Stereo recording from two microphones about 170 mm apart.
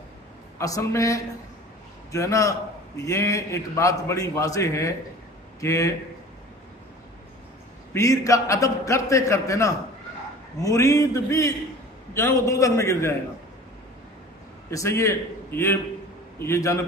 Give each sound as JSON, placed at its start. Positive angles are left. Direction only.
{"t": 0.6, "sound": "a man's voice", "side_deg": 20}
{"t": 7.9, "sound": "a man's voice", "side_deg": 20}
{"t": 14.7, "sound": "a man's voice", "side_deg": 20}